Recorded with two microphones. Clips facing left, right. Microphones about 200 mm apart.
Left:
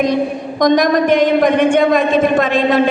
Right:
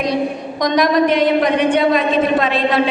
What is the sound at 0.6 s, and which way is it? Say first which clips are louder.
A woman's voice: left 2 dB; 50° left (ahead or behind).